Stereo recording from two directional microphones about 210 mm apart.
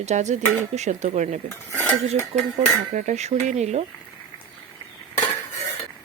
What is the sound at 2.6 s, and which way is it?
Speech, 35° right (ahead or behind).